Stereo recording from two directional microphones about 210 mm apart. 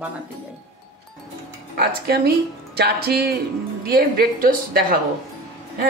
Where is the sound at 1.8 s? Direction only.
45° right (ahead or behind).